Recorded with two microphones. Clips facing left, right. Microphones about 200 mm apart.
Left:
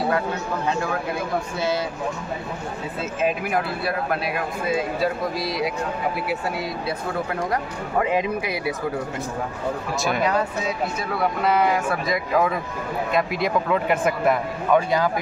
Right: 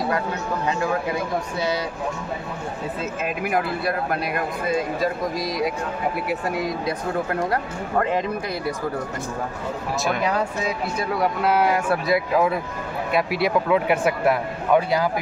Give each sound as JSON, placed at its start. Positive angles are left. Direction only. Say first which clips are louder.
{"t": 3.3, "sound": "speech", "louder": "even", "side_deg": 0}
{"t": 5.4, "sound": "speech", "louder": "right 2 dB", "side_deg": -45}
{"t": 8.0, "sound": "speech", "louder": "left 2 dB", "side_deg": 10}
{"t": 11.4, "sound": "speech", "louder": "even", "side_deg": -5}